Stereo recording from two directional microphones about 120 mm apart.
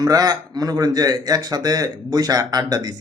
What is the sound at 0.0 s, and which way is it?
A man's voice, 30° right (ahead or behind).